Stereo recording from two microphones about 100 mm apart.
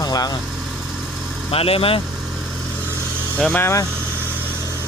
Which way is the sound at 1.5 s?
70° left (ahead or behind).